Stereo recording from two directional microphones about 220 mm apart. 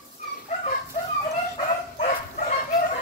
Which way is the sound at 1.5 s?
35° left (ahead or behind).